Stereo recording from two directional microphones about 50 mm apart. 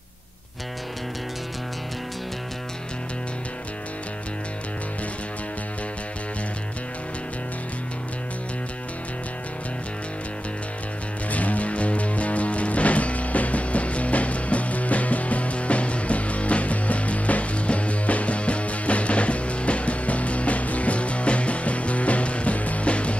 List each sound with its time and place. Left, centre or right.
11.3 s music: left